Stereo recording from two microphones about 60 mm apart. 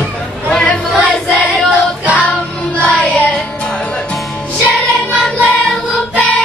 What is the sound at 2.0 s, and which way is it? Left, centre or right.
Child singing, right.